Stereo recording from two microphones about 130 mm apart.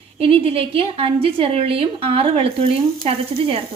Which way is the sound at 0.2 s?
45° right (ahead or behind).